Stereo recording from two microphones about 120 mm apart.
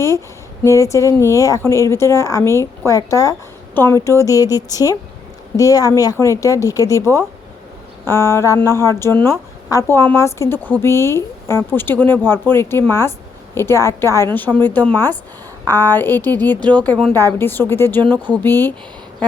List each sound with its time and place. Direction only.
0.6 s a woman's voice: 25° left (ahead or behind)
18.0 s speech: 35° right (ahead or behind)
18.4 s speech: 15° left (ahead or behind)